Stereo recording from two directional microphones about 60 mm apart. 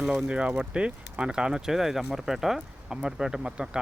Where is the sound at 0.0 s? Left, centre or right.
Centre.